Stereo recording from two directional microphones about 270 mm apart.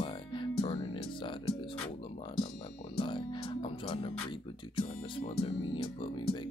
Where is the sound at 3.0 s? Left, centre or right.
Centre.